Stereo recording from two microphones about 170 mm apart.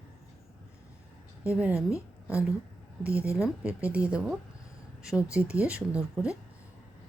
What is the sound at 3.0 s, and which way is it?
Speech, 5° right (ahead or behind).